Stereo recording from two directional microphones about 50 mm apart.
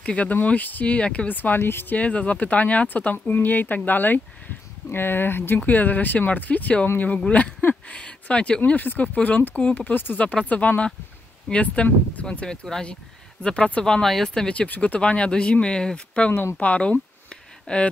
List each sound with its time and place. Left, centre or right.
0.0 s speech: left
2.0 s speech: left
5.6 s speech: left
8.7 s speech: left
12.4 s speech: centre
13.8 s speech: centre
14.7 s speech: left
16.5 s speech: left
17.3 s a sound: centre